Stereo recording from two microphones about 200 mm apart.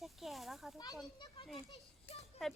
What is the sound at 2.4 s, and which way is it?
Speech, centre (ahead or behind).